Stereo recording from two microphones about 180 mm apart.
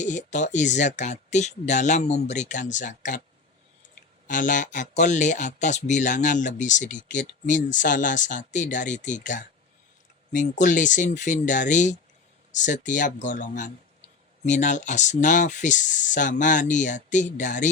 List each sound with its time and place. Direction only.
0.0 s speech: 45° left (ahead or behind)
4.3 s speech: 45° left (ahead or behind)